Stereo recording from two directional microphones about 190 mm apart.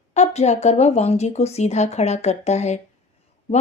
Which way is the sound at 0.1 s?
35° left (ahead or behind).